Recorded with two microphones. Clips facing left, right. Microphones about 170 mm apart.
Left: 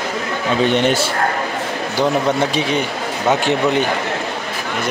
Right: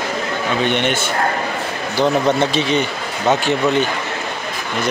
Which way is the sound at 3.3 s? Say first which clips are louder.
Even; 15° left (ahead or behind).